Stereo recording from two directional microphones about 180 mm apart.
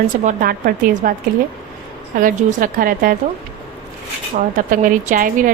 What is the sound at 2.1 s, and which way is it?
Speech, 50° right (ahead or behind).